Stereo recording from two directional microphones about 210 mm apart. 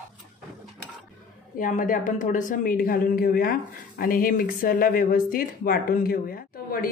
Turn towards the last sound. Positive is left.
turn(degrees=45)  # may be behind; listen again after turning